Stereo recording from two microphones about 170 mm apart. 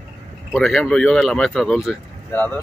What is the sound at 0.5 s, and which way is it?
Speech, 5° left (ahead or behind).